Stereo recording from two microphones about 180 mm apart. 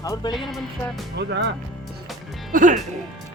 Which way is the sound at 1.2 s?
75° right (ahead or behind).